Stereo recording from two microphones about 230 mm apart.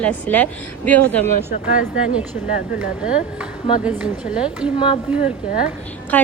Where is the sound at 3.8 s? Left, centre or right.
Centre.